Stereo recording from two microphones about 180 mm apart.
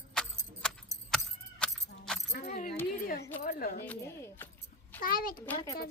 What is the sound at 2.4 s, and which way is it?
Keys jangling, 40° left (ahead or behind).